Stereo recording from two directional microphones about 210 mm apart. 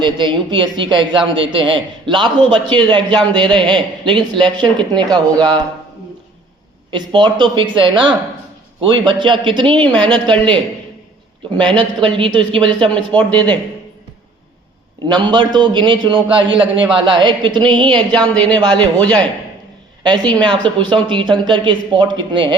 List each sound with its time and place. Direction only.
0.0 s a man's voice: 20° right (ahead or behind)
6.9 s a man's voice: 20° right (ahead or behind)
11.6 s a man's voice: 20° right (ahead or behind)
13.1 s speech: 10° left (ahead or behind)
15.0 s a man's voice: 20° right (ahead or behind)
18.3 s speech: 5° left (ahead or behind)
18.6 s a man's voice: 20° right (ahead or behind)
20.4 s a man's voice: 20° right (ahead or behind)